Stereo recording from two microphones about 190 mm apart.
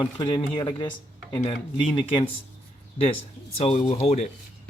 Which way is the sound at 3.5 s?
35° left (ahead or behind).